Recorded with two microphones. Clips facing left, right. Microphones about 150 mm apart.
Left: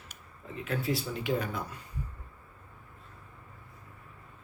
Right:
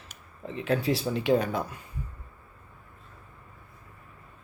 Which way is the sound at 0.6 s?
85° right.